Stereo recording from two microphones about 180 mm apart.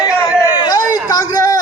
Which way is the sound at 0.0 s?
20° left (ahead or behind).